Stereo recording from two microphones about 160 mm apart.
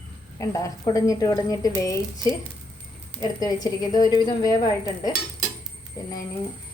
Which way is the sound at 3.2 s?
25° left (ahead or behind).